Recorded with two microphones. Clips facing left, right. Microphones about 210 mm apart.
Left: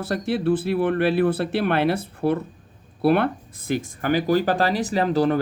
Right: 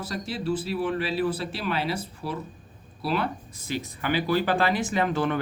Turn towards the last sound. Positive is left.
turn(degrees=35)  # may be behind; listen again after turning